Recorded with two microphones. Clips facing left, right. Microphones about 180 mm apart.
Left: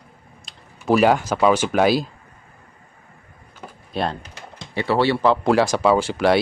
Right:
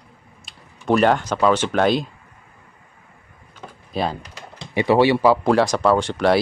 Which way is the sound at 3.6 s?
Centre (ahead or behind).